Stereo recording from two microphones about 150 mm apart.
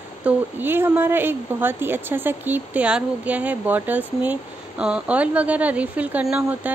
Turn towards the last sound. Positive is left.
turn(degrees=-10)  # may be behind; listen again after turning